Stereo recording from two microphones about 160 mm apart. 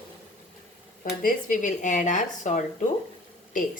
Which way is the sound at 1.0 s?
60° left (ahead or behind).